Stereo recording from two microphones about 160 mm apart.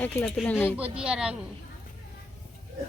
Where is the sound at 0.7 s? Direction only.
5° right (ahead or behind).